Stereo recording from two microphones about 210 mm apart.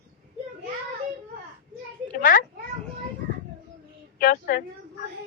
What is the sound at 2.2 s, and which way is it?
Speech, 40° left (ahead or behind).